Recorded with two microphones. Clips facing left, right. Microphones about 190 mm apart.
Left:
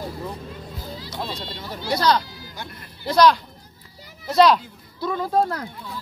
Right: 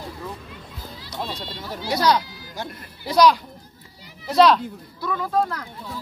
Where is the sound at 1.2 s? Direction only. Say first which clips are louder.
Right 2 dB; centre (ahead or behind).